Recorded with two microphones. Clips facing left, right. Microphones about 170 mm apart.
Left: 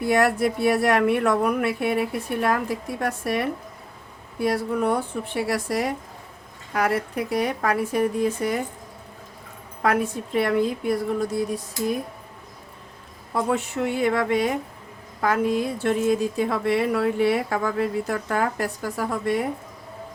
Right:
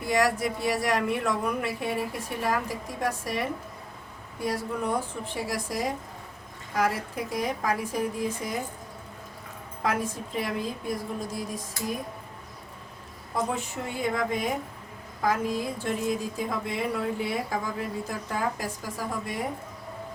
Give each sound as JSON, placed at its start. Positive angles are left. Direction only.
{"t": 0.1, "sound": "speech", "side_deg": 60}
{"t": 4.4, "sound": "a woman's voice", "side_deg": 65}
{"t": 9.8, "sound": "a woman's voice", "side_deg": 65}
{"t": 13.3, "sound": "a woman's voice", "side_deg": 75}